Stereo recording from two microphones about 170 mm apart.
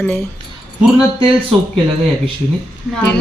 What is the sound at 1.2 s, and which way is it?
Speech, 30° right (ahead or behind).